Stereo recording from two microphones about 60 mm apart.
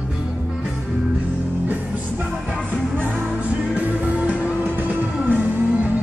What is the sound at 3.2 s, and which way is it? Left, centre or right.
Music, right.